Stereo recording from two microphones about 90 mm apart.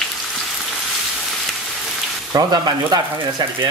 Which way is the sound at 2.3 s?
50° right (ahead or behind).